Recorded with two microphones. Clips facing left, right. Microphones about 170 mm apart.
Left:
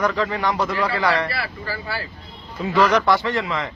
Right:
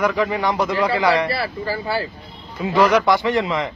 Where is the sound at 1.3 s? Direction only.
30° right (ahead or behind).